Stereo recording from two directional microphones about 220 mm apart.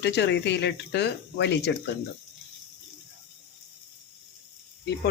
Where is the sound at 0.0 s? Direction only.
50° left (ahead or behind).